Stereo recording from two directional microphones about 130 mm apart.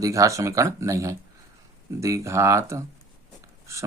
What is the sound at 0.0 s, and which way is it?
Speech, 25° right (ahead or behind).